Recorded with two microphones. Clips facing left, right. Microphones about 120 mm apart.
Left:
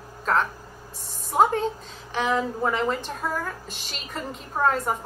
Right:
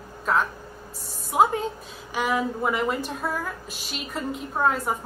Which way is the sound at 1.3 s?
5° right (ahead or behind).